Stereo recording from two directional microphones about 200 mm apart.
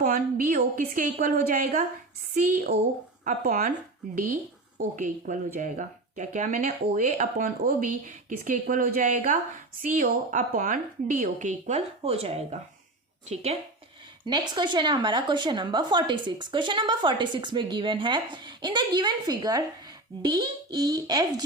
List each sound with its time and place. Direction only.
0.0 s speech: 40° right (ahead or behind)
3.2 s speech: 40° right (ahead or behind)
4.8 s speech: 40° right (ahead or behind)
14.3 s speech: 20° right (ahead or behind)